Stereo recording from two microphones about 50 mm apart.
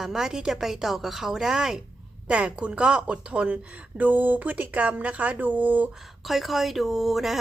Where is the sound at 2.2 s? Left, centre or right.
Right.